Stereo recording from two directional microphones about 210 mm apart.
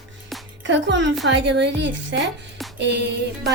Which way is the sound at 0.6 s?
60° right (ahead or behind).